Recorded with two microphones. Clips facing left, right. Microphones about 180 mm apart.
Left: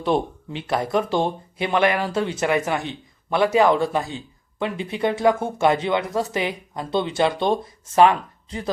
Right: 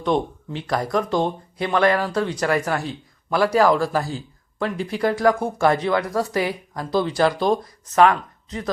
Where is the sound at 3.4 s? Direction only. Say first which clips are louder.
Even; 25° left (ahead or behind).